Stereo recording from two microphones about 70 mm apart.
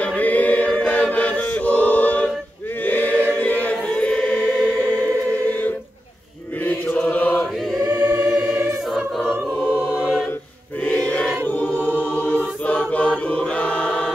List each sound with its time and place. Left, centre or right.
0.0 s chant: left
2.8 s choir: left
6.6 s chant: left
8.1 s choir: right
10.8 s choir: centre